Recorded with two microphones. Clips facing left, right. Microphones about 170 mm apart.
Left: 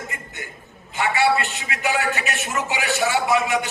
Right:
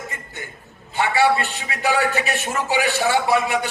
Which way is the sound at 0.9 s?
35° right (ahead or behind).